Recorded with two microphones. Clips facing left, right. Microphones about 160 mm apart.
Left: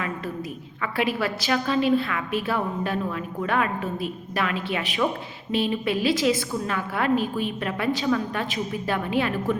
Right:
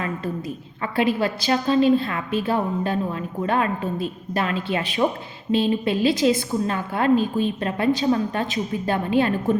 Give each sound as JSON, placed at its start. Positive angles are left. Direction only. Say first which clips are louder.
{"t": 0.8, "sound": "a woman's voice", "louder": "right 4 dB", "side_deg": -25}